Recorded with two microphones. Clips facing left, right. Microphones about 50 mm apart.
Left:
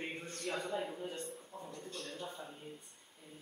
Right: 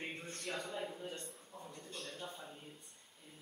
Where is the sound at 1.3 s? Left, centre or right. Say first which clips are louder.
Left 4 dB; centre.